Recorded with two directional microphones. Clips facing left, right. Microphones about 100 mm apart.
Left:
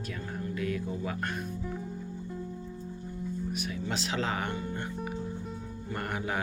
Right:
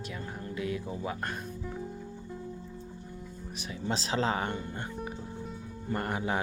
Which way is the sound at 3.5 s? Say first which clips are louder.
Left 1 dB; 30° right (ahead or behind).